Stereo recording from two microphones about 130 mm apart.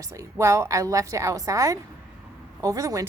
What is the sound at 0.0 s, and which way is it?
A woman's voice, 25° right (ahead or behind).